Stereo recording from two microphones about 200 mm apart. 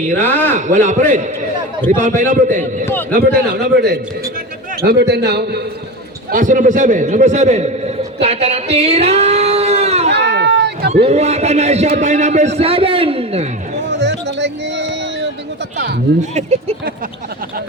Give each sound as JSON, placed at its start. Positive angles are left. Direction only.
{"t": 0.2, "sound": "a man's voice", "side_deg": 10}
{"t": 0.5, "sound": "a man's voice", "side_deg": -35}
{"t": 2.8, "sound": "a man's voice", "side_deg": 10}
{"t": 3.2, "sound": "a man's voice", "side_deg": -50}
{"t": 6.3, "sound": "a man's voice", "side_deg": -40}
{"t": 8.7, "sound": "a sound", "side_deg": -30}
{"t": 10.1, "sound": "cat", "side_deg": -60}
{"t": 11.0, "sound": "a man's voice", "side_deg": -35}
{"t": 13.7, "sound": "a sound", "side_deg": -60}
{"t": 16.3, "sound": "a man's voice", "side_deg": -35}